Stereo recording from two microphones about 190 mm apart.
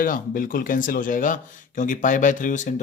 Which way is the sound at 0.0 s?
45° left (ahead or behind).